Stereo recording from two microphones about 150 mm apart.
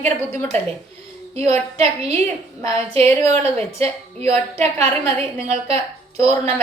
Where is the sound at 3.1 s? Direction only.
15° left (ahead or behind).